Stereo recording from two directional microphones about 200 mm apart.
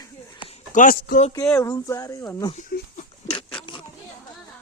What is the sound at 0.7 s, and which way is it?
Speech, 40° left (ahead or behind).